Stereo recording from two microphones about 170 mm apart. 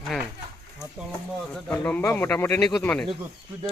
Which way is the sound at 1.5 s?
10° left (ahead or behind).